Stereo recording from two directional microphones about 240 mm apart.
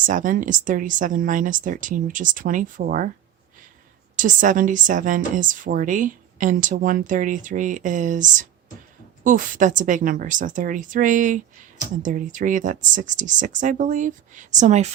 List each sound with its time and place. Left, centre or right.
0.0 s speech: right
4.2 s speech: right